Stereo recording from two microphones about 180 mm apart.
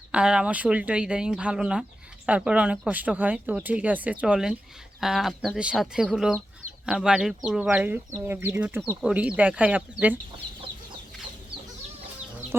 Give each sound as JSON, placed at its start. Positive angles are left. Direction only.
{"t": 0.1, "sound": "speech", "side_deg": -5}
{"t": 10.4, "sound": "chicken", "side_deg": -25}